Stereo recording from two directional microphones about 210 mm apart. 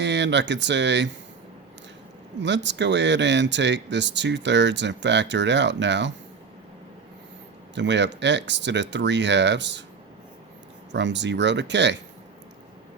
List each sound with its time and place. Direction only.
0.0 s speech: 55° right (ahead or behind)
2.4 s speech: 55° right (ahead or behind)
7.8 s speech: 55° right (ahead or behind)
10.9 s speech: 55° right (ahead or behind)